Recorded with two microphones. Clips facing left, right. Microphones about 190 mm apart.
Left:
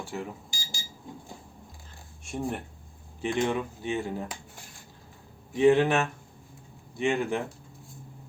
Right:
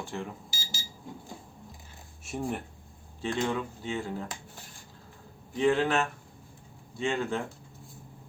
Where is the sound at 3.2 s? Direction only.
15° left (ahead or behind).